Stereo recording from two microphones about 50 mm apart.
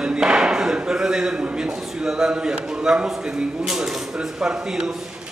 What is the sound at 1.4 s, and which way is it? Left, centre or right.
Speech, right.